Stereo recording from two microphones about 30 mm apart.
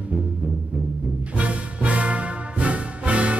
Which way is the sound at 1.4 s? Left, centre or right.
Right.